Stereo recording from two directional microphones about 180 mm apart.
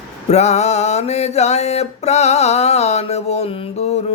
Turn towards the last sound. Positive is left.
turn(degrees=35)  # may be behind; listen again after turning